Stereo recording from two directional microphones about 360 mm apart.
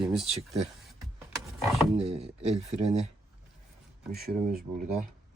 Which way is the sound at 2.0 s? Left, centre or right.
Centre.